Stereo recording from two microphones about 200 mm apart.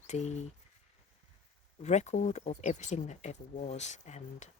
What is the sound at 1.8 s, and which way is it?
Speech, 35° left (ahead or behind).